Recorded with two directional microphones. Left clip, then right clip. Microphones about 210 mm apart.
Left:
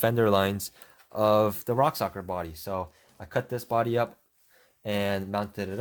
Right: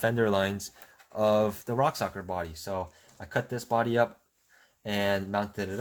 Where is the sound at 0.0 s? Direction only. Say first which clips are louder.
Left 3 dB; 45° left (ahead or behind).